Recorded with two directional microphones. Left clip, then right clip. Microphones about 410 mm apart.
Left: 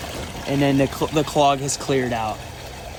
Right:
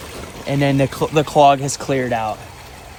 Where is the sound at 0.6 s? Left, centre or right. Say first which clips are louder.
Right 2 dB; right.